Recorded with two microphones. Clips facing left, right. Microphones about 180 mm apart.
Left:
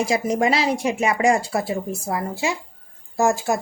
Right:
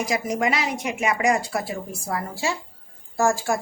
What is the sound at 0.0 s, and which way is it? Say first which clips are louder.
A woman's voice: left 4 dB; 25° left (ahead or behind).